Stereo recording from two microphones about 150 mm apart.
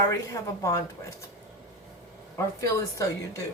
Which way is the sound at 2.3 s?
20° left (ahead or behind).